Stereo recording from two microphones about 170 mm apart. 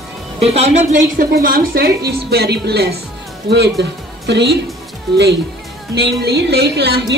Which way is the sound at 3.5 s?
85° right.